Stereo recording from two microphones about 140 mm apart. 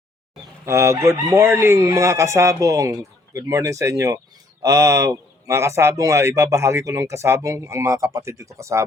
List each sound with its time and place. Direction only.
0.6 s speech: 20° right (ahead or behind)